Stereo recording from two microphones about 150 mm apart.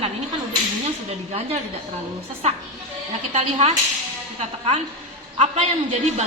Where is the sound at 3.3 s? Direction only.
45° right (ahead or behind).